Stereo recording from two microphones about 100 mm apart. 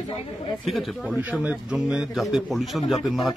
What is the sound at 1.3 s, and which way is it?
Speech, 10° right (ahead or behind).